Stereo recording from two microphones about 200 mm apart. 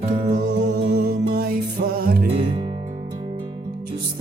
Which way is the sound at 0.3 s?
40° right (ahead or behind).